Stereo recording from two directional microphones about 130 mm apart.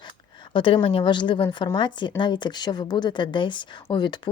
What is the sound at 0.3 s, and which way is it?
A woman's voice, 40° left (ahead or behind).